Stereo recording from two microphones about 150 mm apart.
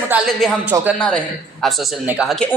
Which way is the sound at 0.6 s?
10° right (ahead or behind).